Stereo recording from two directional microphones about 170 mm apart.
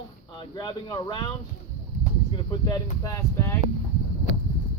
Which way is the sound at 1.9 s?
55° left (ahead or behind).